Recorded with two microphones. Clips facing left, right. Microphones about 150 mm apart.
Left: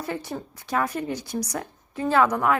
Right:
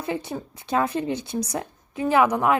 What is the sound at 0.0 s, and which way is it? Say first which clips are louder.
Speech: right 2 dB; 20° right (ahead or behind).